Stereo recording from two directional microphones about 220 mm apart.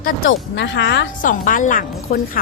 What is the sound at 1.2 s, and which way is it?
Speech, 35° left (ahead or behind).